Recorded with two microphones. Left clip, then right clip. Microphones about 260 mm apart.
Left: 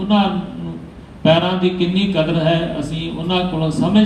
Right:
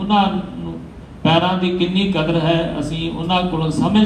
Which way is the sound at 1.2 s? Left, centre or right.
Right.